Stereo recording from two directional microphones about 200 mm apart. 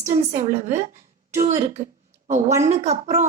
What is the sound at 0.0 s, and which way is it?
Speech, 35° right (ahead or behind).